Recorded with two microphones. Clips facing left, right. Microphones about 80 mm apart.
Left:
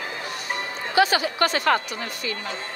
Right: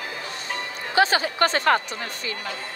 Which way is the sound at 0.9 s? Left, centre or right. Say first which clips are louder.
Even; right.